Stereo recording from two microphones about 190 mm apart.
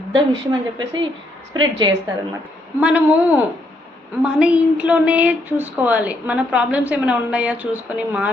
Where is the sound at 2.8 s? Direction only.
5° right (ahead or behind).